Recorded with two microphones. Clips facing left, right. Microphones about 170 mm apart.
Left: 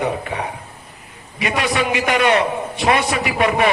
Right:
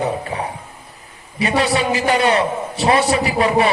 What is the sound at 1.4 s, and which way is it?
A man's voice, 30° right (ahead or behind).